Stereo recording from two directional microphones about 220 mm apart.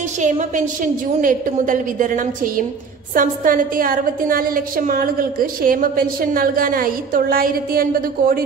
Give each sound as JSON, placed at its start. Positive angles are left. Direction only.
{"t": 0.2, "sound": "a woman's voice", "side_deg": -35}